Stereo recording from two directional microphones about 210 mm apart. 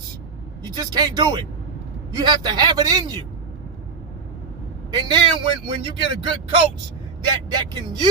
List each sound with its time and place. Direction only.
0.8 s speech: 20° right (ahead or behind)
4.9 s speech: 20° right (ahead or behind)